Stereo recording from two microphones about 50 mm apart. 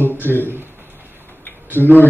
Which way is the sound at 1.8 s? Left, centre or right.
Left.